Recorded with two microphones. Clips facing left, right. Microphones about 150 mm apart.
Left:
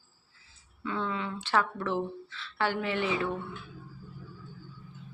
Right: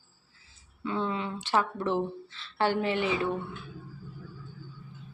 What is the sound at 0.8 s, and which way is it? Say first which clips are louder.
Speech: right 2 dB; 25° right (ahead or behind).